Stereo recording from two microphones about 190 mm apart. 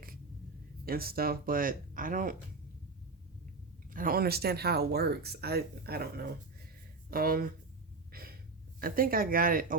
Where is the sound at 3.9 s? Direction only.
45° right (ahead or behind).